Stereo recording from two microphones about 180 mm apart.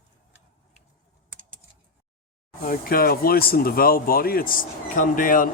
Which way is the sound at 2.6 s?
55° left (ahead or behind).